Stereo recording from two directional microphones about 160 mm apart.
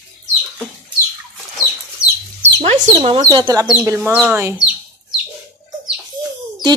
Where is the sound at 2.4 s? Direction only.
45° right (ahead or behind).